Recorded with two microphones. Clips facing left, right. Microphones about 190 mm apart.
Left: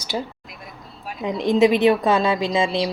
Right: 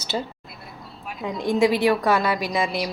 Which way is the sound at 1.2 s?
20° left (ahead or behind).